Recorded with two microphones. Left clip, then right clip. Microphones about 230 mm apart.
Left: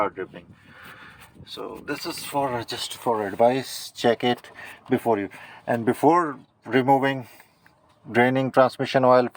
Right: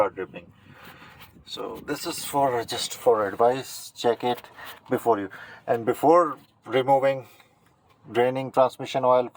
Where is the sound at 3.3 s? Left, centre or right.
Left.